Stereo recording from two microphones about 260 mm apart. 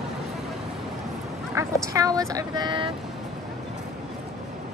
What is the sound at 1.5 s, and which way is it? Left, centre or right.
Speech, centre.